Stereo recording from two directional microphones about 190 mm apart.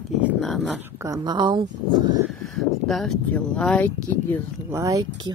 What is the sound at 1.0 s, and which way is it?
Speech, 20° right (ahead or behind).